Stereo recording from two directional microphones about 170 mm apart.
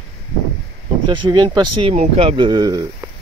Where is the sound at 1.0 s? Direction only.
25° right (ahead or behind).